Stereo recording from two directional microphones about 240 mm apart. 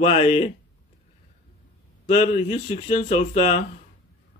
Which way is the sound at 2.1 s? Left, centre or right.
Left.